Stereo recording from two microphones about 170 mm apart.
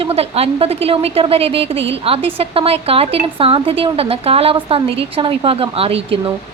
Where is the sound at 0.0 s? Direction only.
35° right (ahead or behind).